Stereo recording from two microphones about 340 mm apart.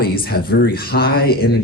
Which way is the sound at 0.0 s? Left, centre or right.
Left.